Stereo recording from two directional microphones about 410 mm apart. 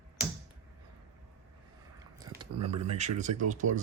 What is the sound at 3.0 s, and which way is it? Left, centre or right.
Speech, centre.